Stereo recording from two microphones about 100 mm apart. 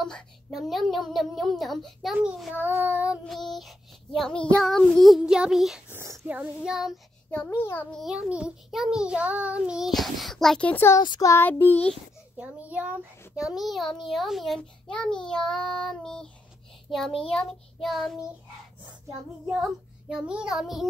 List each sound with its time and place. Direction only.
0.0 s a child's voice: centre (ahead or behind)
2.5 s child singing: 20° right (ahead or behind)
3.3 s a child's voice: centre (ahead or behind)
5.9 s a child's voice: 30° right (ahead or behind)
6.2 s child singing: 15° right (ahead or behind)
6.7 s a child's voice: 5° right (ahead or behind)
7.2 s a child's voice: 20° left (ahead or behind)
8.1 s a child's voice: 10° right (ahead or behind)
10.7 s a child's voice: 25° left (ahead or behind)
11.0 s child singing: 50° left (ahead or behind)
11.4 s a child's voice: 20° left (ahead or behind)
12.4 s child singing: 15° right (ahead or behind)
13.4 s a child's voice: 5° right (ahead or behind)
19.4 s a child's voice: 5° right (ahead or behind)